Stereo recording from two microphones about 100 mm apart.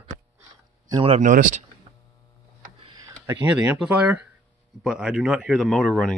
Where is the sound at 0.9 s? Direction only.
70° right (ahead or behind).